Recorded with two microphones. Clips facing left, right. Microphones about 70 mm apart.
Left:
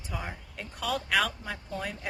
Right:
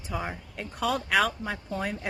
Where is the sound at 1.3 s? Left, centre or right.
Right.